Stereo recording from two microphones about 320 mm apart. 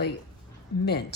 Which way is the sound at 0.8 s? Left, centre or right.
Left.